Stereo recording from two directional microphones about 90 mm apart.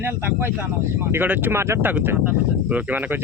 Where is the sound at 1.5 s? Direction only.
30° right (ahead or behind).